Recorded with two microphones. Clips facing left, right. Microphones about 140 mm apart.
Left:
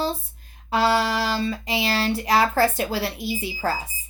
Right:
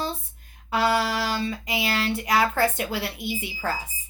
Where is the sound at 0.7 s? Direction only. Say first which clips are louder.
Left 2 dB; 35° left (ahead or behind).